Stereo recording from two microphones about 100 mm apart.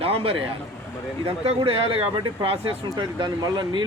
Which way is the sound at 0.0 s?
75° right (ahead or behind).